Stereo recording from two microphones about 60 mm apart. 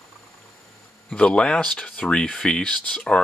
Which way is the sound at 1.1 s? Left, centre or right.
Centre.